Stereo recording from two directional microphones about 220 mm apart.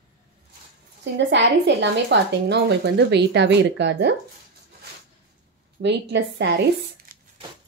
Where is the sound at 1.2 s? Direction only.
50° right (ahead or behind).